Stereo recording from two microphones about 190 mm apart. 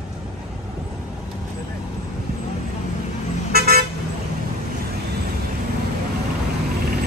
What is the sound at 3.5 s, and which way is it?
Vehicle, 55° right (ahead or behind).